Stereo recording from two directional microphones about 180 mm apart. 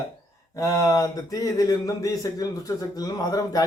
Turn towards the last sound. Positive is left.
turn(degrees=20)  # may be behind; listen again after turning